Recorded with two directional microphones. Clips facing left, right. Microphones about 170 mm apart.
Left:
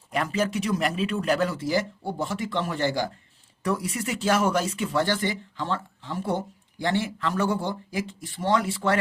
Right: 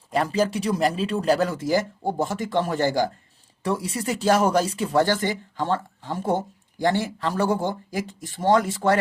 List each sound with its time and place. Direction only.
0.1 s speech: 35° right (ahead or behind)
3.6 s speech: 30° right (ahead or behind)